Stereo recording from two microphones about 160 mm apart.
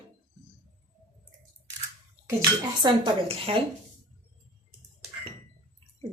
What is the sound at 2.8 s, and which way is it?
Speech, 30° right (ahead or behind).